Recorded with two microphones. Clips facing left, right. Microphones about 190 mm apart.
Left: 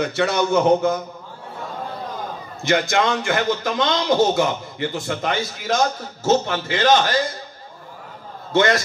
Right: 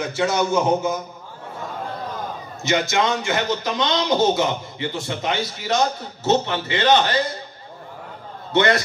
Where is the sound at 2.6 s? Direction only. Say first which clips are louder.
Left 1 dB; 55° left (ahead or behind).